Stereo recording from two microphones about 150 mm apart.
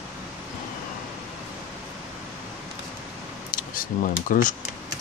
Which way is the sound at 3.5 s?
70° left (ahead or behind).